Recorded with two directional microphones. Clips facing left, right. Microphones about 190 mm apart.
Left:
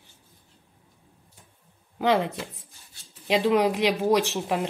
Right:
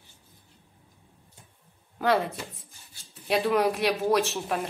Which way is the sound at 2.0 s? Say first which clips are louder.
Left 2 dB; 15° left (ahead or behind).